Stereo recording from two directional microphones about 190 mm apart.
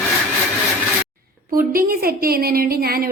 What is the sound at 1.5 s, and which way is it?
A woman's voice, 50° right (ahead or behind).